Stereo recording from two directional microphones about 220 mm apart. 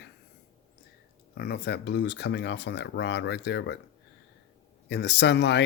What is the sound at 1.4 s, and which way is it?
Speech, 45° left (ahead or behind).